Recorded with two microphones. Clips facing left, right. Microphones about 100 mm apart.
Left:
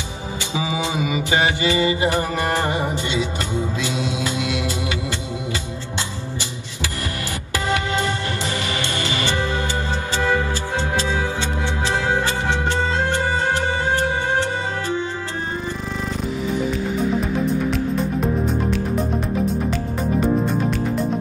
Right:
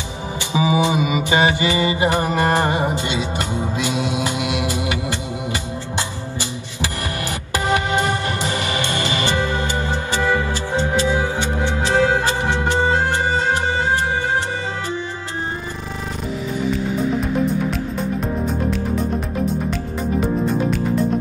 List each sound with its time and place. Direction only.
0.5 s mantra: 20° right (ahead or behind)
7.5 s music: 20° right (ahead or behind)
20.2 s music: centre (ahead or behind)